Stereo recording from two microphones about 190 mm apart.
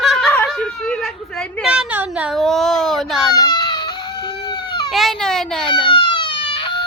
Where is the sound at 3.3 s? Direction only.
20° left (ahead or behind).